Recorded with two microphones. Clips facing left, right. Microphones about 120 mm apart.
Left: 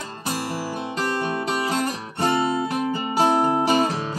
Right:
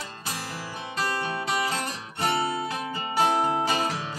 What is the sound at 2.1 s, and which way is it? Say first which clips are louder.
Music: left 4 dB; 30° left (ahead or behind).